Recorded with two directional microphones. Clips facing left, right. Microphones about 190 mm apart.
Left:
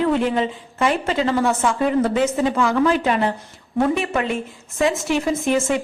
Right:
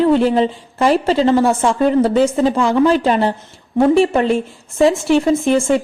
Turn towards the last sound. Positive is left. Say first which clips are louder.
# right 5 dB
turn(degrees=-30)  # may be behind; listen again after turning